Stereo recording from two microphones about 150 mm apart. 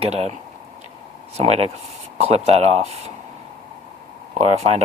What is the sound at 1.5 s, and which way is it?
Speech, 40° right (ahead or behind).